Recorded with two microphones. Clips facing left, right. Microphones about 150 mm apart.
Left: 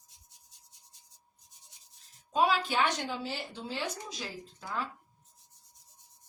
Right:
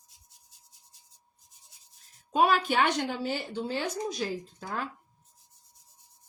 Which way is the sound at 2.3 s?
60° right (ahead or behind).